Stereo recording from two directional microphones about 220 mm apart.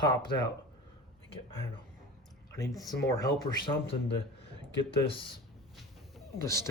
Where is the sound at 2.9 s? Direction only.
15° left (ahead or behind).